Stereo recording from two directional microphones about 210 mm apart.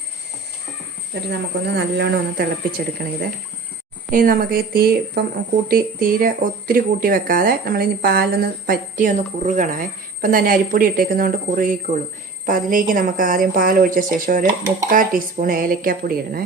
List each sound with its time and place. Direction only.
1.3 s speech: 50° right (ahead or behind)
4.1 s speech: 40° right (ahead or behind)